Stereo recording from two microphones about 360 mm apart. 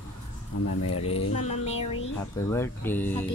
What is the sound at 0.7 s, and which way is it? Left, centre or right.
Speech, left.